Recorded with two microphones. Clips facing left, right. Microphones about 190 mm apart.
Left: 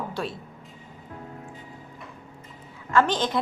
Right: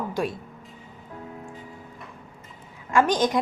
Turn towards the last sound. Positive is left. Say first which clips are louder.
# right 3 dB
turn(degrees=-15)  # may be behind; listen again after turning